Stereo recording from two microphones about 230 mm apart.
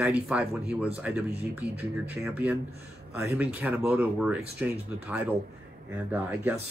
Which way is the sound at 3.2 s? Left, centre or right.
Centre.